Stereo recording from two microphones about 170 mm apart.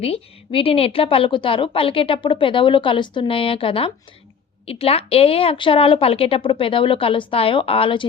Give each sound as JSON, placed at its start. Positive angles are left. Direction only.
{"t": 0.0, "sound": "a woman's voice", "side_deg": 35}